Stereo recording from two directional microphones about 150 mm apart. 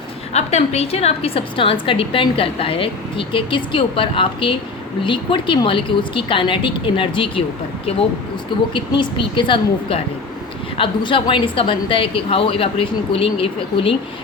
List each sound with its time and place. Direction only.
0.3 s a woman's voice: 45° left (ahead or behind)
8.7 s a woman's voice: 35° left (ahead or behind)